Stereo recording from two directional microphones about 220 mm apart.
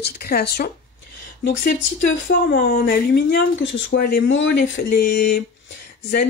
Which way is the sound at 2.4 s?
40° left (ahead or behind).